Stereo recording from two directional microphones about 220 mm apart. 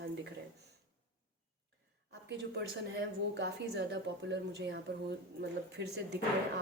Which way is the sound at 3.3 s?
50° right (ahead or behind).